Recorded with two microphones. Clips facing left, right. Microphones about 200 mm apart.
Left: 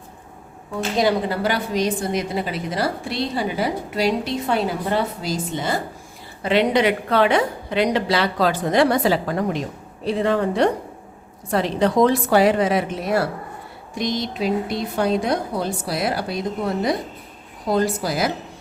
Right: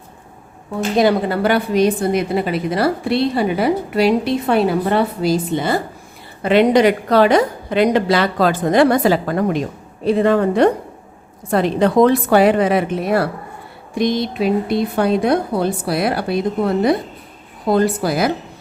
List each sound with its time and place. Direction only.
0.8 s a woman's voice: 55° right (ahead or behind)